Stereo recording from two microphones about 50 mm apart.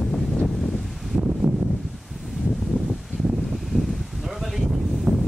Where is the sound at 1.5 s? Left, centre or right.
Right.